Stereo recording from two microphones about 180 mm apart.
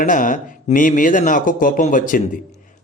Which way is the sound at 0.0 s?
45° left (ahead or behind).